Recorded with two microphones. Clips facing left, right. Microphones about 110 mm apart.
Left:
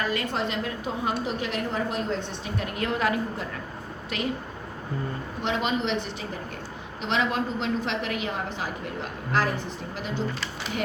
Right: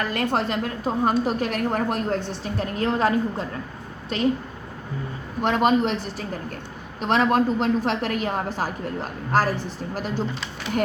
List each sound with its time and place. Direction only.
0.1 s a woman's voice: 55° right (ahead or behind)
2.6 s a woman's voice: 35° right (ahead or behind)
5.4 s a woman's voice: 45° right (ahead or behind)